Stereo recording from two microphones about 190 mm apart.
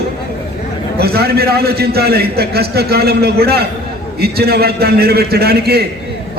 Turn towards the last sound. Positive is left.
turn(degrees=-55)  # may be behind; listen again after turning